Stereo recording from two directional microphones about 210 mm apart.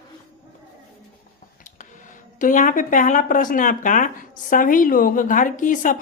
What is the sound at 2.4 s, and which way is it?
Speech, 40° left (ahead or behind).